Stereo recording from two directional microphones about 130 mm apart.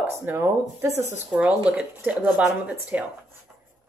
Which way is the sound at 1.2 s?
10° right (ahead or behind).